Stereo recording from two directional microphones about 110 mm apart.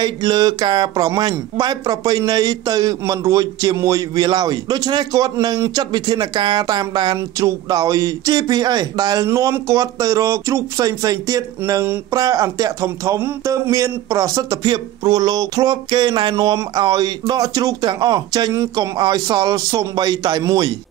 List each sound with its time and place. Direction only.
0.0 s speech: 40° right (ahead or behind)